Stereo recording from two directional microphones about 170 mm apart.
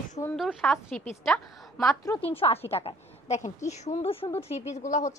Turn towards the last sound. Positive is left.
turn(degrees=45)  # may be behind; listen again after turning